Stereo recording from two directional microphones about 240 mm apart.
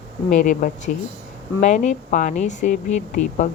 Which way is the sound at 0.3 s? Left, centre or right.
Left.